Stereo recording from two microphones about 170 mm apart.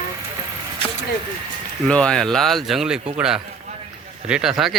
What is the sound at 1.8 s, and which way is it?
Speech, 5° left (ahead or behind).